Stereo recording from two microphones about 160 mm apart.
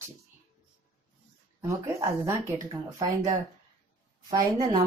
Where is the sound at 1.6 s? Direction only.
20° right (ahead or behind).